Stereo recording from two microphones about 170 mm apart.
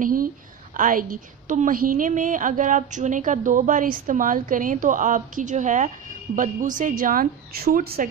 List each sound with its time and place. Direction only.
0.0 s a woman's voice: 55° right (ahead or behind)